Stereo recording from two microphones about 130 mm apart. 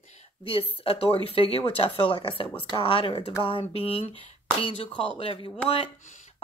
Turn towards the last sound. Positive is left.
turn(degrees=45)  # may be behind; listen again after turning